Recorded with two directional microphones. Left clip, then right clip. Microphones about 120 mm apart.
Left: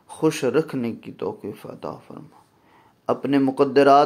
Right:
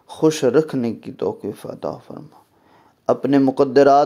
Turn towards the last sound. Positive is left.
turn(degrees=-45)  # may be behind; listen again after turning